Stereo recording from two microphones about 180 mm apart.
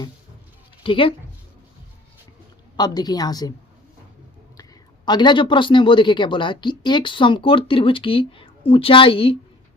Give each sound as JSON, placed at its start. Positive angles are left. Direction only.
{"t": 0.8, "sound": "speech", "side_deg": 30}
{"t": 2.7, "sound": "speech", "side_deg": 25}
{"t": 5.0, "sound": "speech", "side_deg": 25}